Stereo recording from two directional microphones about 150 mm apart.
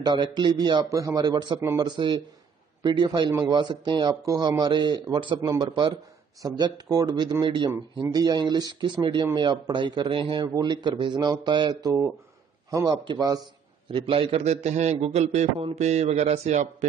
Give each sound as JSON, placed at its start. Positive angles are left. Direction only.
{"t": 0.0, "sound": "a man's voice", "side_deg": -30}